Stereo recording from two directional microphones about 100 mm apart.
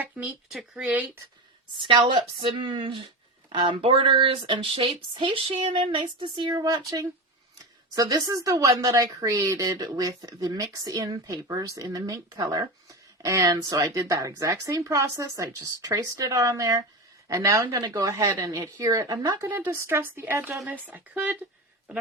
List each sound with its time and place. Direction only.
0.5 s speech: 10° right (ahead or behind)
1.7 s a woman's voice: 55° right (ahead or behind)
19.5 s speech: 20° right (ahead or behind)